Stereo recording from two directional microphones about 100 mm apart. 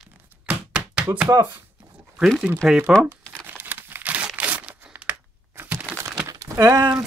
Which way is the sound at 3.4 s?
20° right (ahead or behind).